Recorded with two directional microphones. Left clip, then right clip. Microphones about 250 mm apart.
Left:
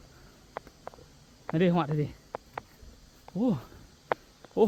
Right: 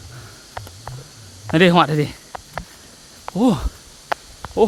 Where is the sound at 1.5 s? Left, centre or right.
Right.